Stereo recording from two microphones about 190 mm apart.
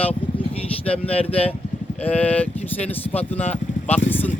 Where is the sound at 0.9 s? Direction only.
30° left (ahead or behind).